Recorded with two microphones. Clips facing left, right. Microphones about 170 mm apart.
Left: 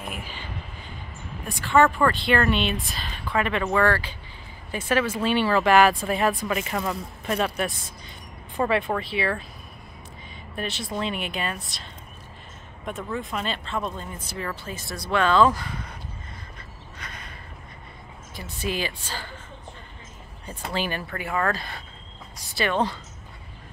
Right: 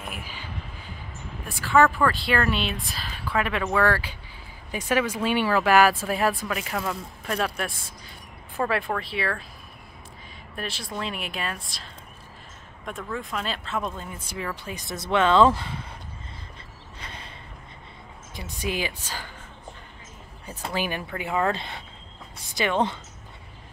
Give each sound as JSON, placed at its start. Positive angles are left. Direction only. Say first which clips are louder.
{"t": 1.5, "sound": "speech", "louder": "even", "side_deg": 0}
{"t": 10.5, "sound": "speech", "louder": "left 3 dB", "side_deg": 0}
{"t": 17.0, "sound": "a sound", "louder": "right 1 dB", "side_deg": -30}
{"t": 18.3, "sound": "speech", "louder": "even", "side_deg": -15}
{"t": 20.4, "sound": "speech", "louder": "even", "side_deg": -10}